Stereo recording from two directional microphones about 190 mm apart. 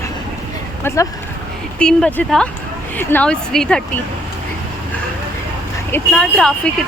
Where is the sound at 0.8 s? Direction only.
15° left (ahead or behind).